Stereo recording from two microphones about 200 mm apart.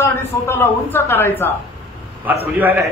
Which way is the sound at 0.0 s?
10° left (ahead or behind).